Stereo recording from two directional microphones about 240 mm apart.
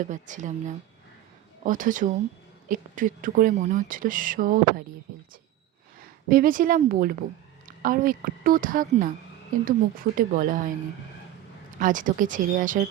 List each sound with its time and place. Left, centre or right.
0.0 s speech: right
1.6 s speech: right
6.0 s speech: right
11.8 s speech: right